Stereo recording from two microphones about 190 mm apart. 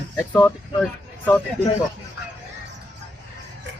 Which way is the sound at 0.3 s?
5° left (ahead or behind).